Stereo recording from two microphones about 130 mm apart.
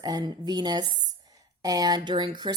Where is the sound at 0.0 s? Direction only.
30° right (ahead or behind).